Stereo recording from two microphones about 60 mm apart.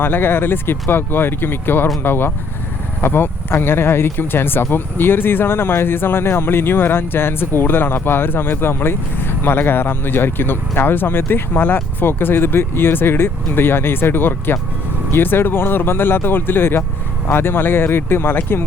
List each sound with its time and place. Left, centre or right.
0.0 s speech: left